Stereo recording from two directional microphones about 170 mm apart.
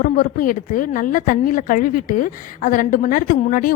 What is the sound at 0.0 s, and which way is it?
A woman's voice, 55° left (ahead or behind).